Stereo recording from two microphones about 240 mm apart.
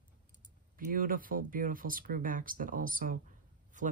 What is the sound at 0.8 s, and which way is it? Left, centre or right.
Speech, right.